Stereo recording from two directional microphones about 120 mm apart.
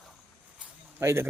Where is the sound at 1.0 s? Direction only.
20° right (ahead or behind).